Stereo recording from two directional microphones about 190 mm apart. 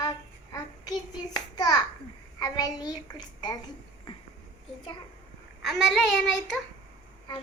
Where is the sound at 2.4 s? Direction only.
20° left (ahead or behind).